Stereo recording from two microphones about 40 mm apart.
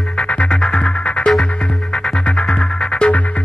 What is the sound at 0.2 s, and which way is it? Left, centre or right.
Music, left.